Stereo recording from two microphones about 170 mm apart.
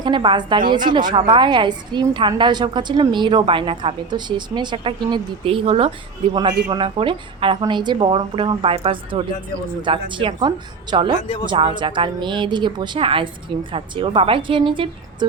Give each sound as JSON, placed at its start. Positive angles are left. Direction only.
{"t": 0.0, "sound": "a woman's voice", "side_deg": -30}